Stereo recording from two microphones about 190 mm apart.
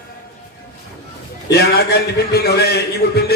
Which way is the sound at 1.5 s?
55° left (ahead or behind).